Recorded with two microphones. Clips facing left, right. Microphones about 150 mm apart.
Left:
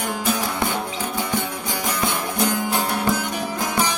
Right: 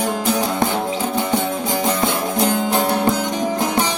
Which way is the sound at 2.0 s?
20° right (ahead or behind).